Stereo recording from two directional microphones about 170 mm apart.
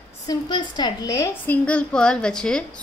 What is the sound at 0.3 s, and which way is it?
A woman's voice, 25° left (ahead or behind).